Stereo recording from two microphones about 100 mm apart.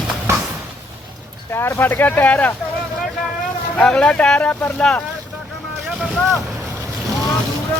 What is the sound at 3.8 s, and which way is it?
Speech, 10° left (ahead or behind).